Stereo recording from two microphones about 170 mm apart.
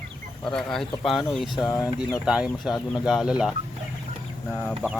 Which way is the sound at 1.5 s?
20° left (ahead or behind).